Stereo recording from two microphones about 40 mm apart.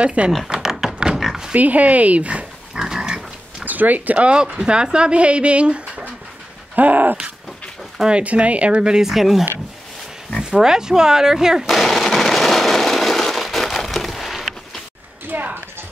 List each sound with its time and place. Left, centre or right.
0.0 s speech: right
0.5 s thunk: centre
1.5 s speech: right
2.7 s pig: centre
3.6 s speech: right
4.6 s speech: right
6.7 s a sound: right
8.1 s speech: right
9.0 s speech: centre
10.5 s speech: centre
11.7 s machine gun: centre
12.2 s a sound: centre
15.3 s clip-clop: right